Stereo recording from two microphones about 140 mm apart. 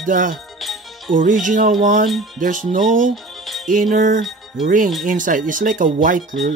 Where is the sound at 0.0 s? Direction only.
70° right (ahead or behind).